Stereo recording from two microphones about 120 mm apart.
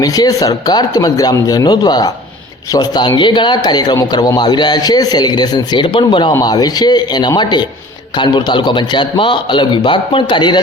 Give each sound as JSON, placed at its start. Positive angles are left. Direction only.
{"t": 0.0, "sound": "a man's voice", "side_deg": 30}